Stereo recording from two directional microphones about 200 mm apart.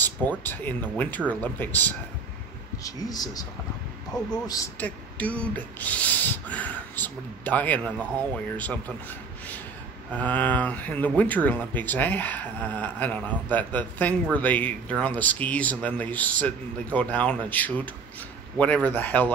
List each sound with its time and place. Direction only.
0.0 s speech: 10° left (ahead or behind)
4.7 s speech: 5° left (ahead or behind)
10.1 s speech: 5° left (ahead or behind)